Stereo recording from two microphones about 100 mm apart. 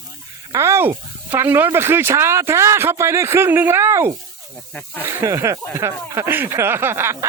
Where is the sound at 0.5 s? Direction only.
25° right (ahead or behind).